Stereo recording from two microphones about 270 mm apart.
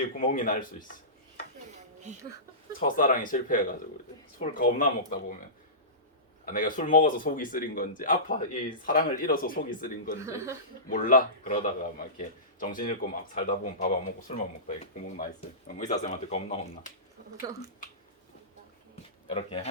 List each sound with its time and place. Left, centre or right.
0.2 s a man's voice: left
2.8 s a man's voice: left
6.5 s speech: left
10.2 s speech: centre
10.8 s a man's voice: left
19.3 s a man's voice: left